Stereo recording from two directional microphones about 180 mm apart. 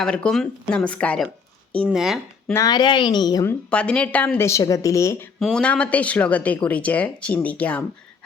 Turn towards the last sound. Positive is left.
turn(degrees=10)  # may be behind; listen again after turning